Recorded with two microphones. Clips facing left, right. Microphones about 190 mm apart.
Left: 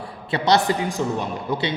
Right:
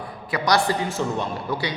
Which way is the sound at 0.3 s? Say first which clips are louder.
Left 2 dB; 25° left (ahead or behind).